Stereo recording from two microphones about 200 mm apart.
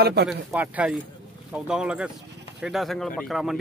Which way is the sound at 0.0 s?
55° right (ahead or behind).